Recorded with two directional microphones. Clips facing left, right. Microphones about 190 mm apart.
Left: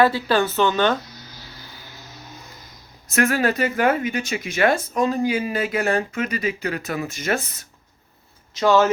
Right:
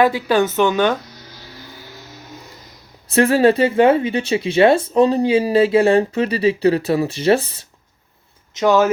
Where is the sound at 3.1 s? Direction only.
30° right (ahead or behind).